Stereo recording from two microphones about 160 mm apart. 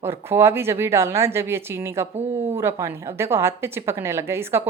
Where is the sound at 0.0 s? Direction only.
15° right (ahead or behind).